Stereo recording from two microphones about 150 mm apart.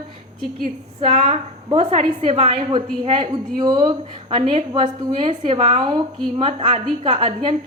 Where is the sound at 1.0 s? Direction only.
45° right (ahead or behind).